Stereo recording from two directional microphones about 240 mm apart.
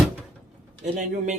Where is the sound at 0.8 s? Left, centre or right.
Right.